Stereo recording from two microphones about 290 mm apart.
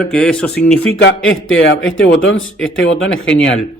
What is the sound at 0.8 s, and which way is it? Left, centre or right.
Speech, left.